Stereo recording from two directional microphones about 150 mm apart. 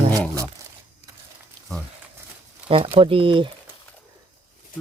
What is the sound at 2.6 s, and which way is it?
Speech, 40° right (ahead or behind).